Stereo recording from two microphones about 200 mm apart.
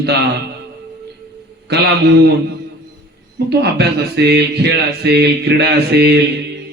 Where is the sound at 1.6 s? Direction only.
55° right (ahead or behind).